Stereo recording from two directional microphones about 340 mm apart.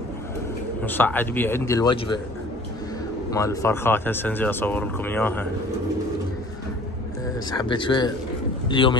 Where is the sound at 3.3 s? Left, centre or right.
Centre.